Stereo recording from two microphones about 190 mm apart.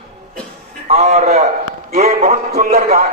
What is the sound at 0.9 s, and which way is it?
A man's voice, 35° right (ahead or behind).